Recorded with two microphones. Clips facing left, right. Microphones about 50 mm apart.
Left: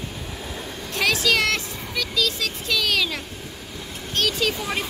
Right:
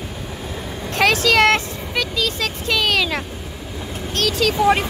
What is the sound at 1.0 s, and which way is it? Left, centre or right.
Vehicle, right.